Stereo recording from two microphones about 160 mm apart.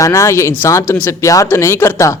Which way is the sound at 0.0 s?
20° left (ahead or behind).